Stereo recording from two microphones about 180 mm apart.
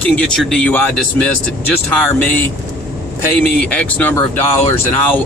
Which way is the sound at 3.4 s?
5° left (ahead or behind).